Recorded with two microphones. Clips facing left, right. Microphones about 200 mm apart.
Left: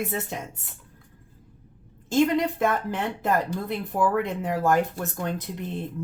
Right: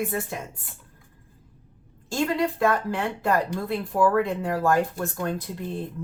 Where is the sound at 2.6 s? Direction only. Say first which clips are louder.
Right 1 dB; 20° left (ahead or behind).